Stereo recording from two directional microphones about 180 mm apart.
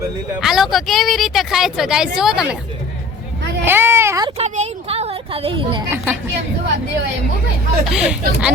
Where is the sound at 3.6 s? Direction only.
10° right (ahead or behind).